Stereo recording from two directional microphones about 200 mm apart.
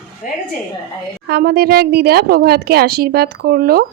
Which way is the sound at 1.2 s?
50° right (ahead or behind).